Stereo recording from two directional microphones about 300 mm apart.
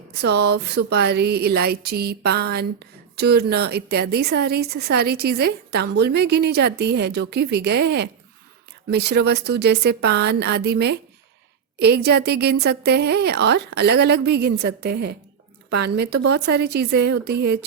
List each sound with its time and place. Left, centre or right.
0.1 s speech: right